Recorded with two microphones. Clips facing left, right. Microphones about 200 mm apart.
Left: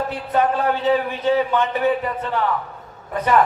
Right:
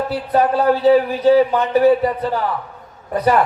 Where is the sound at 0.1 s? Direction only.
35° right (ahead or behind).